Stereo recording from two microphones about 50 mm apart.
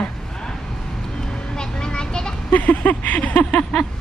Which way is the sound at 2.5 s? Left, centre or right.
Left.